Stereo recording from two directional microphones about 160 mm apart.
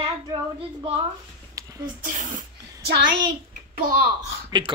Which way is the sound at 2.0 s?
55° right (ahead or behind).